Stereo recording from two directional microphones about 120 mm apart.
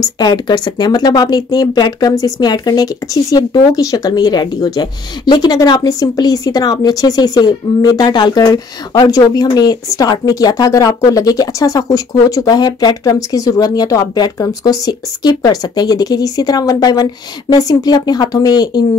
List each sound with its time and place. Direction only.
0.0 s speech: 35° left (ahead or behind)